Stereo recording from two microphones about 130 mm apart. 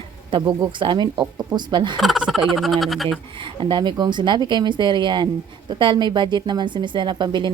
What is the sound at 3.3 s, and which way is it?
A woman's voice, 40° right (ahead or behind).